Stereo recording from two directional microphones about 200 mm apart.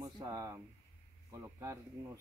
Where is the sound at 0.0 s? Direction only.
15° right (ahead or behind).